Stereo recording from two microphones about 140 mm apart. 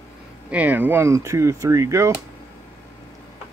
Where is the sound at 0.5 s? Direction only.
10° right (ahead or behind).